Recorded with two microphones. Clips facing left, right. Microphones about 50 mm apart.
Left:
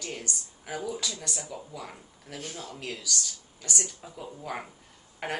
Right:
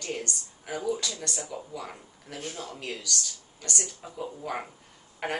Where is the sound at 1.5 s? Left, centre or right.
Centre.